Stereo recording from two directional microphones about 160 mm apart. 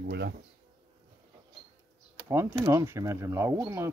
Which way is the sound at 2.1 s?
15° right (ahead or behind).